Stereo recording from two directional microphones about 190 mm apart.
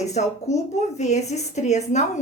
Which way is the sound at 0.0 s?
35° left (ahead or behind).